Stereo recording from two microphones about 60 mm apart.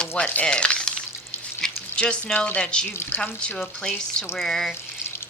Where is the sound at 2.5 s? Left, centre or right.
Centre.